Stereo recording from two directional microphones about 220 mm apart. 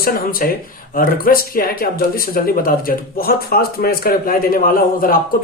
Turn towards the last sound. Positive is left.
turn(degrees=40)  # may be behind; listen again after turning